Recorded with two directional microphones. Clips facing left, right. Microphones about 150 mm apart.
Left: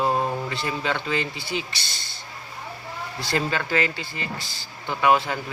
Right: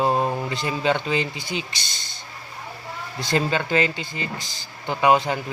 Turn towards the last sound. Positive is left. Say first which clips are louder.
# right 2 dB
turn(degrees=-20)  # may be behind; listen again after turning